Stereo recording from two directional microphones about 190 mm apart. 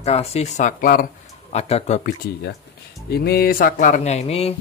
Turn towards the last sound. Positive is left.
turn(degrees=30)  # may be behind; listen again after turning